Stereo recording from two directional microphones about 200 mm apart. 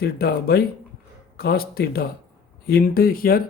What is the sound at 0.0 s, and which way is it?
Speech, 50° left (ahead or behind).